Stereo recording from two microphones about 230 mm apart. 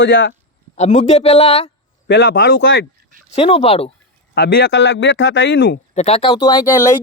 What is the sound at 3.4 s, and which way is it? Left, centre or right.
Speech, left.